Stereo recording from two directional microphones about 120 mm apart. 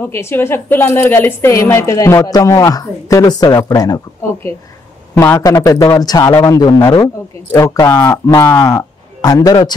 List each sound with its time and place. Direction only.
0.0 s a woman's voice: 20° left (ahead or behind)
5.1 s speech: 15° left (ahead or behind)
5.4 s a woman's voice: 30° left (ahead or behind)